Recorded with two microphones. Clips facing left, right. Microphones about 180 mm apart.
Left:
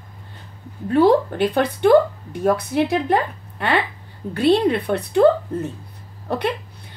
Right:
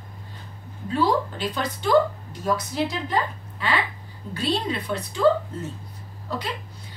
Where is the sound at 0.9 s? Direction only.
60° left (ahead or behind).